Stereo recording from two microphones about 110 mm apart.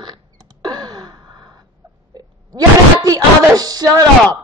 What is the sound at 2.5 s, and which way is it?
Speech, 35° right (ahead or behind).